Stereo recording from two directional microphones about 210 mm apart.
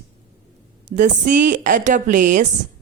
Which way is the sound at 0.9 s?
40° right (ahead or behind).